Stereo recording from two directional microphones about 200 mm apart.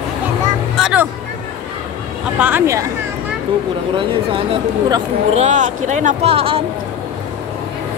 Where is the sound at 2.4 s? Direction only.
10° right (ahead or behind).